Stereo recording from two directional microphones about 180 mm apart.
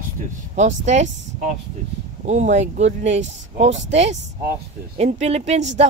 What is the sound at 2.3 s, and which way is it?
Speech, 40° right (ahead or behind).